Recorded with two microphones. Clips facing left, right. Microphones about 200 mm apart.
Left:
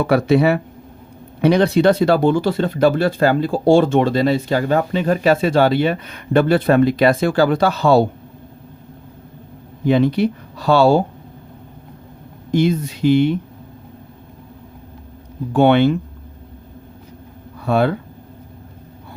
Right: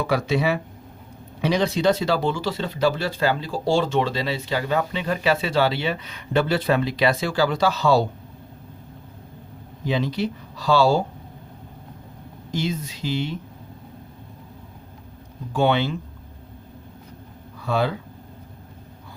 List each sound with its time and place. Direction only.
0.0 s speech: 60° left (ahead or behind)
9.8 s speech: 60° left (ahead or behind)
12.5 s speech: 60° left (ahead or behind)
15.5 s speech: 60° left (ahead or behind)
17.6 s speech: 55° left (ahead or behind)